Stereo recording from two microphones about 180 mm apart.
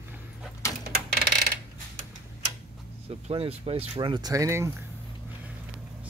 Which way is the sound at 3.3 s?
30° right (ahead or behind).